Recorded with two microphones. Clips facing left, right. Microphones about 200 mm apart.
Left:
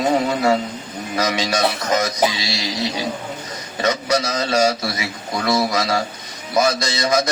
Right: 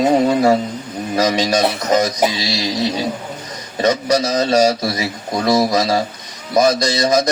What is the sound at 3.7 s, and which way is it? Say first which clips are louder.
A man's voice: right 4 dB; 25° right (ahead or behind).